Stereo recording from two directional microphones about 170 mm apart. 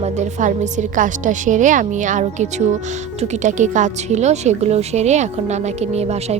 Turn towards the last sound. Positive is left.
turn(degrees=-40)  # may be behind; listen again after turning